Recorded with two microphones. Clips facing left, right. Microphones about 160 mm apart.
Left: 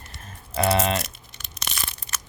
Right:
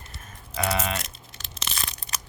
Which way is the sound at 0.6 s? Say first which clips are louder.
Left 6 dB; 30° left (ahead or behind).